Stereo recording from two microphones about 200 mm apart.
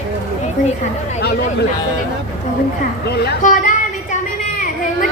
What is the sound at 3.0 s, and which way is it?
Speech, 55° left (ahead or behind).